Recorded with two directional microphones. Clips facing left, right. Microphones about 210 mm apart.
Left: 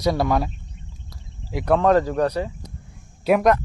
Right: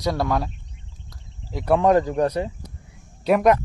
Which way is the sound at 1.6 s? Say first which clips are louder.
Even; 10° right (ahead or behind).